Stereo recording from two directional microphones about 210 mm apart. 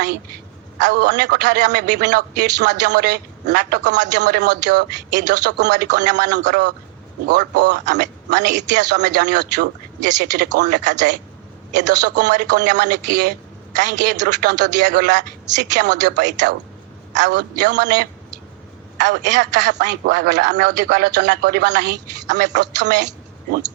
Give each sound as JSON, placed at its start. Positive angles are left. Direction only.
{"t": 0.8, "sound": "a man's voice", "side_deg": -55}